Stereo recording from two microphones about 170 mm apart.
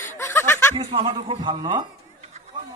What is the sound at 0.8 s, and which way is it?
Speech, 35° right (ahead or behind).